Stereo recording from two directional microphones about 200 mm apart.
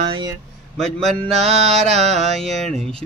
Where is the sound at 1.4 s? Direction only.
30° right (ahead or behind).